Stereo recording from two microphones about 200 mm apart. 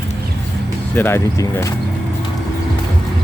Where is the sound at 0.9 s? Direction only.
10° left (ahead or behind).